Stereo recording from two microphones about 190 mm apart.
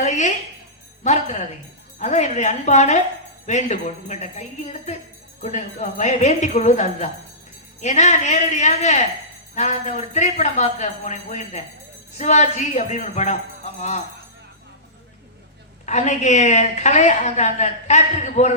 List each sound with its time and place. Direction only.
0.0 s music: 40° left (ahead or behind)
1.0 s a woman's voice: 40° left (ahead or behind)
15.9 s a woman's voice: 40° left (ahead or behind)